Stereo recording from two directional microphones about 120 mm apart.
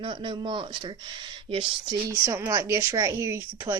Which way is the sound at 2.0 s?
25° right (ahead or behind).